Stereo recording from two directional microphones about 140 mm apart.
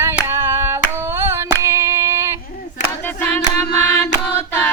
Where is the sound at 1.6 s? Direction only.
20° right (ahead or behind).